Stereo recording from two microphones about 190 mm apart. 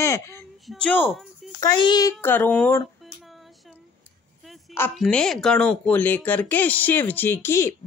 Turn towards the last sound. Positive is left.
turn(degrees=15)  # may be behind; listen again after turning